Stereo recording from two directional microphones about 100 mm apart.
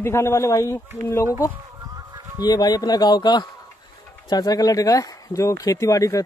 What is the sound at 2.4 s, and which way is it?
A man's voice, 40° left (ahead or behind).